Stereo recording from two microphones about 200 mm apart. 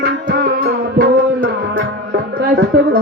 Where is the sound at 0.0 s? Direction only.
50° right (ahead or behind).